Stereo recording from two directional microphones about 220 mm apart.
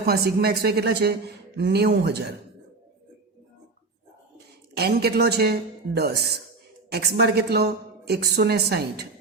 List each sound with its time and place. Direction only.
0.0 s a woman's voice: 45° right (ahead or behind)
4.8 s a woman's voice: 45° right (ahead or behind)